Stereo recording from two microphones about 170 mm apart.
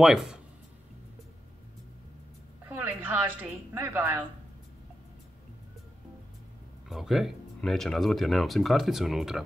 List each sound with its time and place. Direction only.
0.0 s speech: centre (ahead or behind)
2.7 s a woman's voice: 10° right (ahead or behind)
6.9 s speech: centre (ahead or behind)